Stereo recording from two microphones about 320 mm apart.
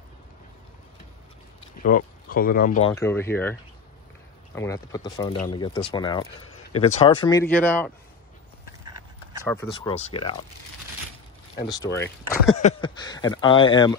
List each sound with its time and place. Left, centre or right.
1.8 s speech: left
2.9 s speech: centre
4.6 s speech: centre
9.4 s speech: centre
11.6 s speech: centre